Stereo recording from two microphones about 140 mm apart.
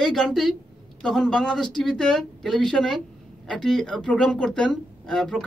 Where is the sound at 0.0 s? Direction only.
Centre (ahead or behind).